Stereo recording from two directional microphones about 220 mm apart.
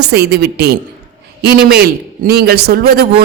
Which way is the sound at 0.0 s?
45° right (ahead or behind).